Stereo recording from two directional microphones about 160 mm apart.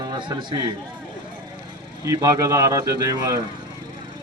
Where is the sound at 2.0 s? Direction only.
20° right (ahead or behind).